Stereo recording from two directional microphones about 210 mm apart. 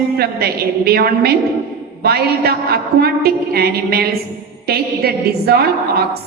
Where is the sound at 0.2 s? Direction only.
50° right (ahead or behind).